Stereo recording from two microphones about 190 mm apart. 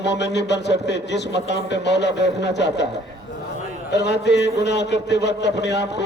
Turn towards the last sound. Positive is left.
turn(degrees=65)  # may be behind; listen again after turning